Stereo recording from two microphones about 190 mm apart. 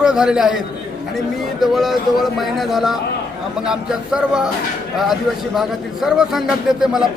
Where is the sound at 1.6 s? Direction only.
Centre (ahead or behind).